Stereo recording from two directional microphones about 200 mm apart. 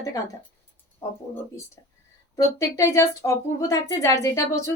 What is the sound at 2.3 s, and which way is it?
A woman's voice, 15° left (ahead or behind).